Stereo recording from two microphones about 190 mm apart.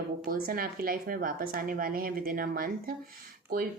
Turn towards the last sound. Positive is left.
turn(degrees=-50)  # may be behind; listen again after turning